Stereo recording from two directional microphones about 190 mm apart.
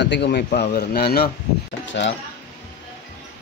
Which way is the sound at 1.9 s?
75° left (ahead or behind).